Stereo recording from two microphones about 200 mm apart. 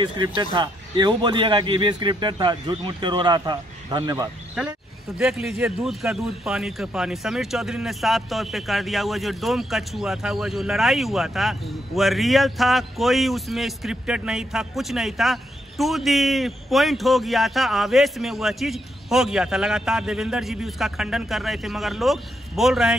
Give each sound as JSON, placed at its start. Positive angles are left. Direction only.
{"t": 0.0, "sound": "a man's voice", "side_deg": -20}
{"t": 5.2, "sound": "a man's voice", "side_deg": 0}